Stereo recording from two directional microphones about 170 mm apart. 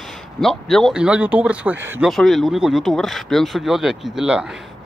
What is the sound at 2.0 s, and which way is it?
Speech, centre (ahead or behind).